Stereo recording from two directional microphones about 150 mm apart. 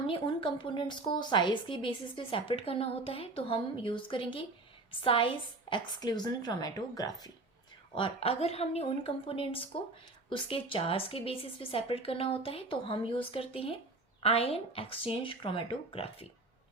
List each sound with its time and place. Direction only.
0.1 s a woman's voice: 35° left (ahead or behind)
7.9 s a woman's voice: 40° left (ahead or behind)